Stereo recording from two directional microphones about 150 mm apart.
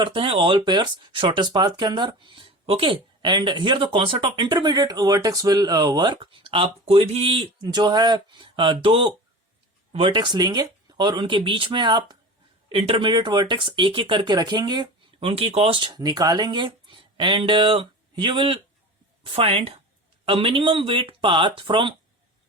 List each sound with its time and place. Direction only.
0.0 s speech: 35° right (ahead or behind)
15.9 s speech: 25° right (ahead or behind)